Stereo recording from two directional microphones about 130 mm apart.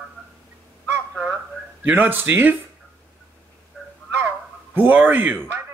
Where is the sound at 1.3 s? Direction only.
10° right (ahead or behind).